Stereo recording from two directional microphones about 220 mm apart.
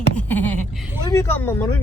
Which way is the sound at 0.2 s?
10° left (ahead or behind).